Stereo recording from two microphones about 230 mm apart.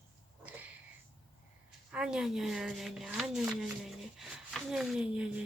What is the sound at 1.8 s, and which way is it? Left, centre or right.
Speech, centre.